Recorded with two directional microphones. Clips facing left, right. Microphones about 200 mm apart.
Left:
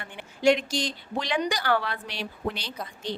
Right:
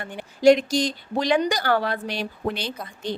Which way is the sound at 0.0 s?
40° right (ahead or behind).